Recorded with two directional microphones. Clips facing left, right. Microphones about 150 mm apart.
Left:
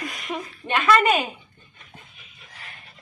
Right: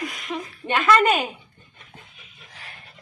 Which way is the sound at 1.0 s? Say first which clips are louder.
Right 1 dB; centre (ahead or behind).